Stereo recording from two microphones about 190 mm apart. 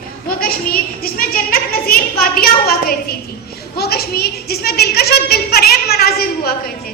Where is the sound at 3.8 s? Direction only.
55° left (ahead or behind).